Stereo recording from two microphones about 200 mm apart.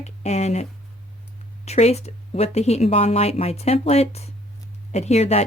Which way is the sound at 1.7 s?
30° left (ahead or behind).